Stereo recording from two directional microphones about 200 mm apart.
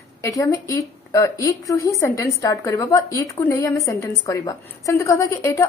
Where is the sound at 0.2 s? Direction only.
15° left (ahead or behind).